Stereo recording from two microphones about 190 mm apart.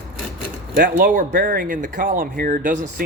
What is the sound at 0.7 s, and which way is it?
Speech, 45° right (ahead or behind).